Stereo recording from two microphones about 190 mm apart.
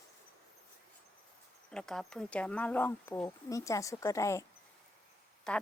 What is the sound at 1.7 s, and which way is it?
Speech, 5° left (ahead or behind).